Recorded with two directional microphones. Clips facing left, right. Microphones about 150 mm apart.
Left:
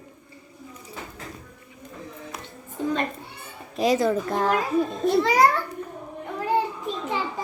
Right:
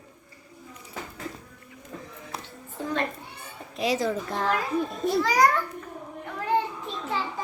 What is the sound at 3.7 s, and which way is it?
Speech, 45° left (ahead or behind).